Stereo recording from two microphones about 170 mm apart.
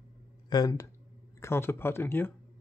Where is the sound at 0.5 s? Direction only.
20° left (ahead or behind).